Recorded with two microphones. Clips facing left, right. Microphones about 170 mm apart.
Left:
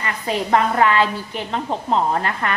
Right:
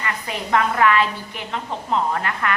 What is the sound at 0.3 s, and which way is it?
A woman's voice, 30° left (ahead or behind).